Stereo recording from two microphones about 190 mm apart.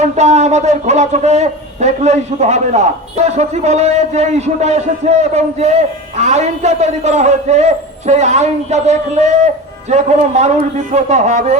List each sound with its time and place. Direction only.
0.0 s a man's voice: 35° right (ahead or behind)